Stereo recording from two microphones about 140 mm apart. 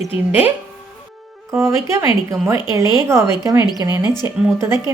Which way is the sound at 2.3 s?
20° right (ahead or behind).